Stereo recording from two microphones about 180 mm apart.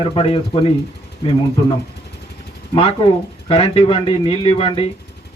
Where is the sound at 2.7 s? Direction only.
30° left (ahead or behind).